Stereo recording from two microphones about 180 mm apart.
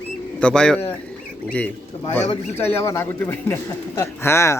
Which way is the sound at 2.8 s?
15° left (ahead or behind).